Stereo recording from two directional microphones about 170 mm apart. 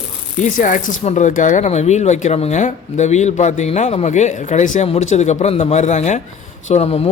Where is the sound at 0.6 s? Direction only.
50° left (ahead or behind).